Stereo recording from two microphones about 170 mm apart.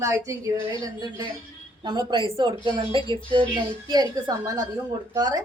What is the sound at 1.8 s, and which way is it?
A woman's voice, 25° right (ahead or behind).